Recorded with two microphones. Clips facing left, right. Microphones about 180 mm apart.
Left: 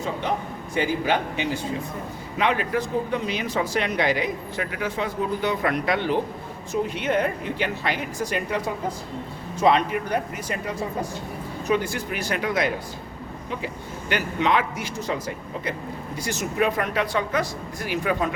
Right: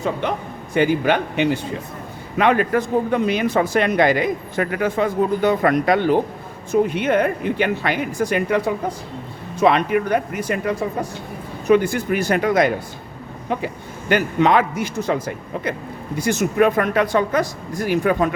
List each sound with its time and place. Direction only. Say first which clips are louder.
0.7 s speech: right 6 dB; 60° right (ahead or behind)
2.4 s speech: right 6 dB; 50° right (ahead or behind)
6.9 s speech: right 5 dB; 60° right (ahead or behind)